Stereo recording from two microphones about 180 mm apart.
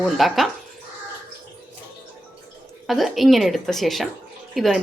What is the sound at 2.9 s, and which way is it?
A woman's voice, centre (ahead or behind).